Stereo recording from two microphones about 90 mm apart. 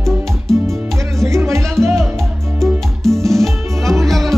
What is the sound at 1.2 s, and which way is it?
Music, 30° right (ahead or behind).